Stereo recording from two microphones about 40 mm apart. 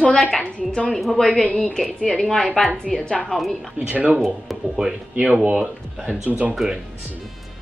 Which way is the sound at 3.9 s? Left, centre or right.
Right.